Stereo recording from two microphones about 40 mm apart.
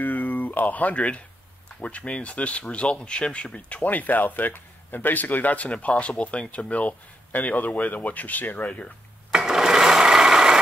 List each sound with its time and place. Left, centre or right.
0.0 s speech: left
5.7 s speech: left
9.4 s sewing machine: centre